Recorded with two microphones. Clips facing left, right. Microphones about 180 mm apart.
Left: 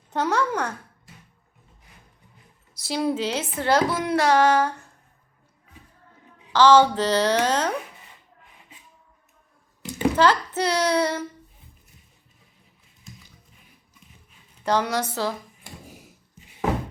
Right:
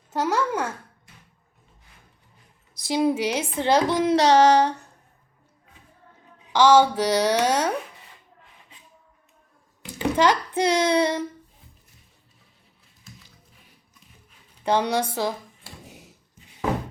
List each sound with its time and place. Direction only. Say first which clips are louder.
0.1 s a child's voice: even; 5° right (ahead or behind)
2.8 s a woman's voice: right 3 dB; 15° right (ahead or behind)
6.5 s a woman's voice: left 1 dB; 10° right (ahead or behind)
10.2 s a woman's voice: right 1 dB; 15° right (ahead or behind)
14.6 s a woman's voice: right 1 dB; 15° right (ahead or behind)